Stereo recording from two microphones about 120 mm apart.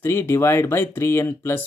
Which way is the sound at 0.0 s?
20° left (ahead or behind).